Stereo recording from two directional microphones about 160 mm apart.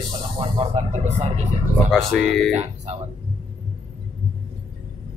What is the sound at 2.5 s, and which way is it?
Speech, 45° right (ahead or behind).